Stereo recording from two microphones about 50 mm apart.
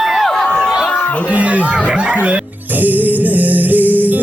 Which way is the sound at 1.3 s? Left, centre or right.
Right.